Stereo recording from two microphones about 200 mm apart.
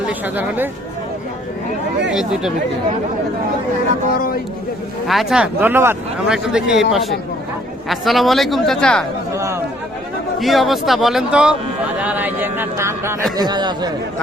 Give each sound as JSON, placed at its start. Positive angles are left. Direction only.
{"t": 0.1, "sound": "speech", "side_deg": -10}
{"t": 2.0, "sound": "a man's voice", "side_deg": -5}
{"t": 4.1, "sound": "speech", "side_deg": 45}
{"t": 5.0, "sound": "a man's voice", "side_deg": 0}
{"t": 7.9, "sound": "a man's voice", "side_deg": 0}
{"t": 9.3, "sound": "chatter", "side_deg": -15}
{"t": 10.4, "sound": "a man's voice", "side_deg": 0}